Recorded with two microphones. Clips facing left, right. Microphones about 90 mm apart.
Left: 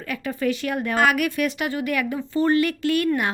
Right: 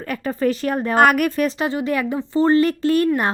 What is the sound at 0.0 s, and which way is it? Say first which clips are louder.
Speech: right 4 dB; 35° right (ahead or behind).